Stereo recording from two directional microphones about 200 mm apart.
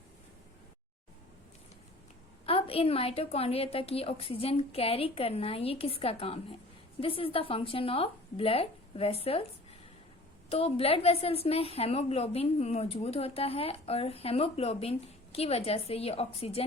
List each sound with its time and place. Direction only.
2.5 s a woman's voice: 30° left (ahead or behind)
10.5 s a woman's voice: 30° left (ahead or behind)